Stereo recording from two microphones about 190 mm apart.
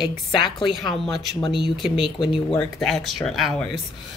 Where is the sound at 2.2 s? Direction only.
25° left (ahead or behind).